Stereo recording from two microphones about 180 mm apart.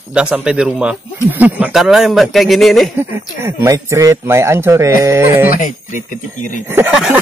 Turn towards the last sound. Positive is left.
turn(degrees=-10)  # may be behind; listen again after turning